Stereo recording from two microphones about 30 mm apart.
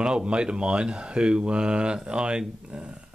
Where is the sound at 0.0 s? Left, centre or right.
Right.